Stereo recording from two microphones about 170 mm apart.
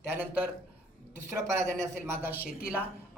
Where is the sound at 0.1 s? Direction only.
10° right (ahead or behind).